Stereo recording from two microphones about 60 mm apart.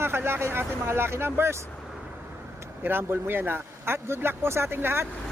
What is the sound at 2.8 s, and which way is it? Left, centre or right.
Speech, right.